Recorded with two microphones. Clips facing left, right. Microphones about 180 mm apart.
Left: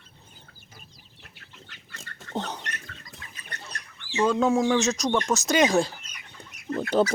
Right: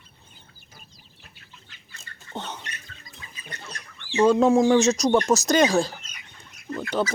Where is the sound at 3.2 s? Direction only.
65° left (ahead or behind).